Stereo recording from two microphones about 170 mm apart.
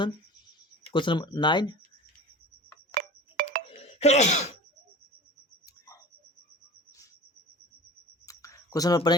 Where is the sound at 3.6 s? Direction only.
35° left (ahead or behind).